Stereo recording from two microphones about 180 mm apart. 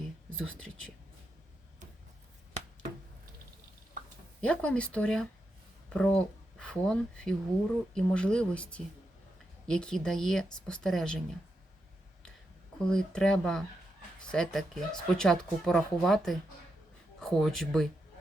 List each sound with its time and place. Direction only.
0.3 s speech: 5° left (ahead or behind)
4.0 s a sound: 50° right (ahead or behind)
4.4 s speech: 5° left (ahead or behind)
12.8 s speech: 5° left (ahead or behind)